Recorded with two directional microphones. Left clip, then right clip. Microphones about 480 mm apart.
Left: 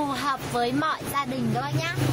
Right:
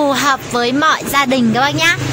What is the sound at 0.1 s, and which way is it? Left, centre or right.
Speech, left.